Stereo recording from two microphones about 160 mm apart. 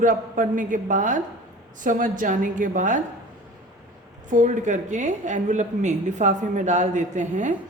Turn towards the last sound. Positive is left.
turn(degrees=-50)  # may be behind; listen again after turning